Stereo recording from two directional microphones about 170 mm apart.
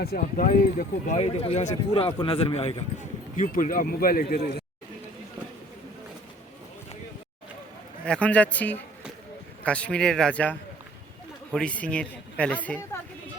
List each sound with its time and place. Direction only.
0.0 s speech: 60° left (ahead or behind); by 2.7 s 35° left (ahead or behind)
3.3 s speech: 50° left (ahead or behind); by 4.6 s 65° left (ahead or behind)
8.0 s a man's voice: 5° left (ahead or behind)